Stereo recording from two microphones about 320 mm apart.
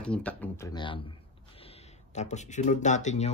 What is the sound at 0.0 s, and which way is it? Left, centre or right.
Speech, centre.